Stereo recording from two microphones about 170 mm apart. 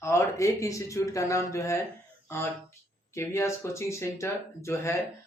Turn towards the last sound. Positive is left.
turn(degrees=15)  # may be behind; listen again after turning